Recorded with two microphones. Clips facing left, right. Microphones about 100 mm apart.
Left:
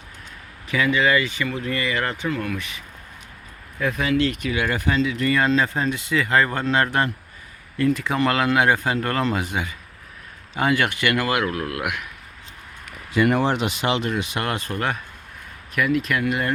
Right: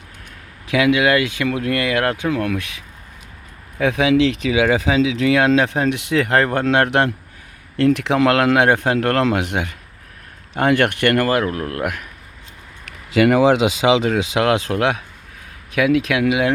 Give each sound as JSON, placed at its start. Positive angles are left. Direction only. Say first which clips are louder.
{"t": 0.7, "sound": "speech", "louder": "right 4 dB", "side_deg": -70}
{"t": 3.8, "sound": "speech", "louder": "right 6 dB", "side_deg": -80}
{"t": 11.3, "sound": "speech", "louder": "right 4 dB", "side_deg": -35}
{"t": 12.8, "sound": "a sound", "louder": "right 5 dB", "side_deg": -90}
{"t": 13.8, "sound": "speech", "louder": "right 7 dB", "side_deg": -90}